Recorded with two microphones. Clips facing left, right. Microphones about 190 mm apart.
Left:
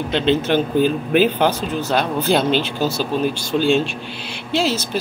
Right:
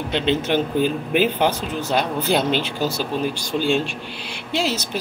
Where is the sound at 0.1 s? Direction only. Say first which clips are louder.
Left 3 dB; 15° right (ahead or behind).